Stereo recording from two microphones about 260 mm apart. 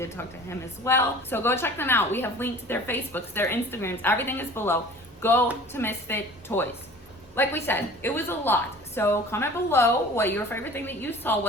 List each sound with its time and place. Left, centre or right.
0.0 s a woman's voice: centre